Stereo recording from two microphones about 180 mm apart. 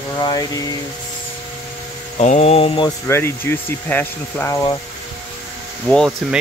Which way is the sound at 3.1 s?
15° left (ahead or behind).